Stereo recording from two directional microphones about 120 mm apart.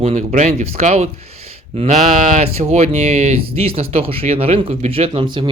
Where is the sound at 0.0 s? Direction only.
75° right (ahead or behind).